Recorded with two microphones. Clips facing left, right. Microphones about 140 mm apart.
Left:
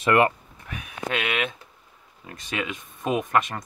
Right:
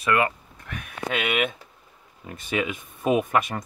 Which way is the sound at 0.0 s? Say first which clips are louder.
Left 3 dB; 30° left (ahead or behind).